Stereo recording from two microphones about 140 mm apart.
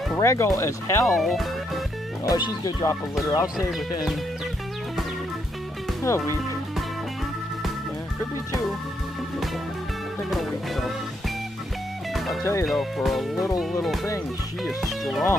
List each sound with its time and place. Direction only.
0.2 s speech: 20° left (ahead or behind)
1.0 s speech: centre (ahead or behind)
2.2 s speech: 30° left (ahead or behind)
6.0 s speech: 20° left (ahead or behind)
10.3 s music: centre (ahead or behind)
12.6 s speech: centre (ahead or behind)
14.6 s speech: centre (ahead or behind)